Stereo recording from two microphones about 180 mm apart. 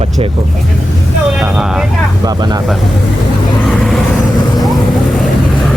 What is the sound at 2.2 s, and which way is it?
Speech, 20° right (ahead or behind).